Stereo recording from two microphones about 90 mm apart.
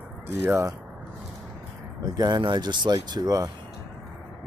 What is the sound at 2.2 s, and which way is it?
Speech, 50° right (ahead or behind).